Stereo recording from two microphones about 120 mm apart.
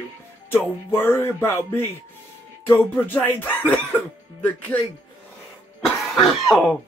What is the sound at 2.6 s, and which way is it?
Speech, 15° left (ahead or behind).